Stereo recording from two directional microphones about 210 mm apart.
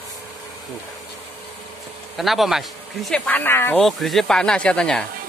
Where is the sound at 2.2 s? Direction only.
Centre (ahead or behind).